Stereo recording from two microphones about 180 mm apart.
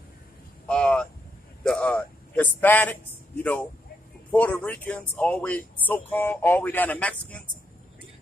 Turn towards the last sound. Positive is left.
turn(degrees=5)  # may be behind; listen again after turning